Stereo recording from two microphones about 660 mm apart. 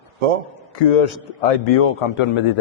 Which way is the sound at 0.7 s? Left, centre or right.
Left.